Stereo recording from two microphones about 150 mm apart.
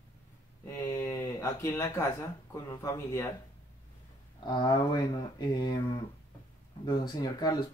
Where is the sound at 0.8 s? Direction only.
20° left (ahead or behind).